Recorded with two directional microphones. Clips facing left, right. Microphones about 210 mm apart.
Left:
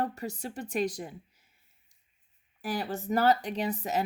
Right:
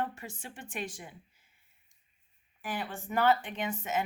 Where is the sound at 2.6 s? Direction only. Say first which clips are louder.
Left 5 dB; 40° left (ahead or behind).